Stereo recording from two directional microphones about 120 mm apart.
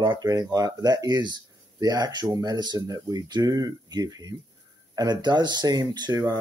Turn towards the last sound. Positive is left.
turn(degrees=-35)  # may be behind; listen again after turning